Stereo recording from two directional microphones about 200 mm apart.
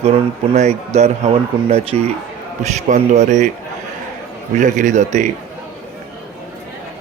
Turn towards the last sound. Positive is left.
turn(degrees=-35)  # may be behind; listen again after turning